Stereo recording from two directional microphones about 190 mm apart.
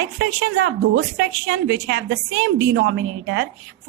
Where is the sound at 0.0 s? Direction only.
60° right (ahead or behind).